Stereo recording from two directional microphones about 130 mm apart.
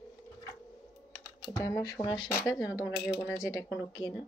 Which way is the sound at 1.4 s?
25° left (ahead or behind).